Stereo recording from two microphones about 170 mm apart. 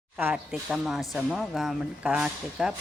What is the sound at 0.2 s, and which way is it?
Speech, 5° right (ahead or behind).